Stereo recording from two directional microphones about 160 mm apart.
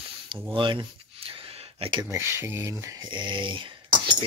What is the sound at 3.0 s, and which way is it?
Speech, 30° right (ahead or behind).